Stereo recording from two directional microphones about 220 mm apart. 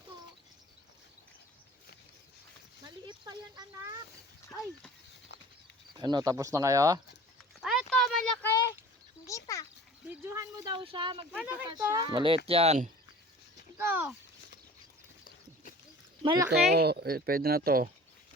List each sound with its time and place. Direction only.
3.1 s a sound: 20° right (ahead or behind)
5.3 s patter: 50° left (ahead or behind)
5.9 s speech: 20° right (ahead or behind)
7.6 s a sound: centre (ahead or behind)
10.1 s a sound: 10° right (ahead or behind)
11.3 s speech: 5° right (ahead or behind)
12.0 s speech: 25° right (ahead or behind)
13.7 s speech: 10° right (ahead or behind)
16.2 s speech: 20° right (ahead or behind)
16.5 s speech: 45° right (ahead or behind)